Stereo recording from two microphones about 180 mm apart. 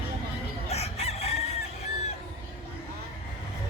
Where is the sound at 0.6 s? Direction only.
35° left (ahead or behind).